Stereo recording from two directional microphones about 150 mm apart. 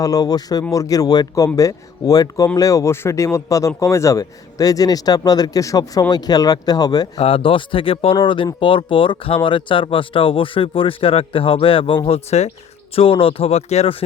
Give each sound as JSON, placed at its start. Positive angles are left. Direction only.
{"t": 0.0, "sound": "speech", "side_deg": 25}
{"t": 7.2, "sound": "speech", "side_deg": 40}